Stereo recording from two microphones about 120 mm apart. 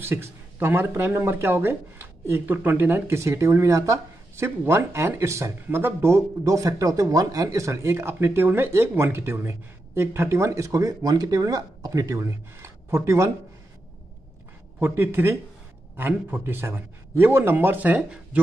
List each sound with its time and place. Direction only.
0.0 s speech: 20° right (ahead or behind)
14.8 s speech: 20° right (ahead or behind)